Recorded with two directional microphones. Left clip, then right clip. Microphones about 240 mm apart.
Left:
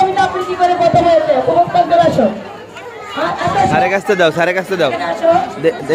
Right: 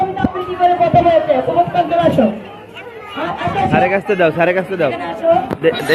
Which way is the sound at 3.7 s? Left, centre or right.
Left.